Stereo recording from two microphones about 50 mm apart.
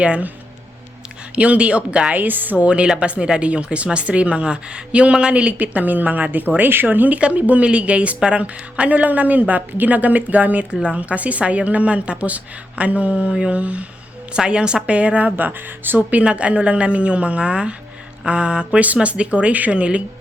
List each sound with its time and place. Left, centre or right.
0.0 s speech: right
1.4 s speech: right
2.1 s a woman's voice: right
2.6 s a woman's voice: right
15.4 s a woman's voice: right